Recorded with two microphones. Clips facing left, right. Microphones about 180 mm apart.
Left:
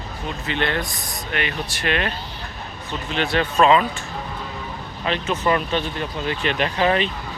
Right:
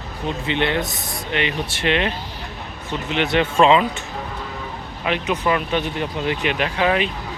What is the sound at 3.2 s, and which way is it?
Speech, 20° right (ahead or behind).